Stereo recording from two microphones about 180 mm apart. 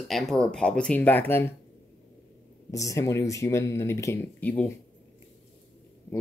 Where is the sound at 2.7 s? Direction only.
20° left (ahead or behind).